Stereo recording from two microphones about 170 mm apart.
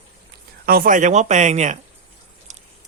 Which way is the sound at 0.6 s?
60° right (ahead or behind).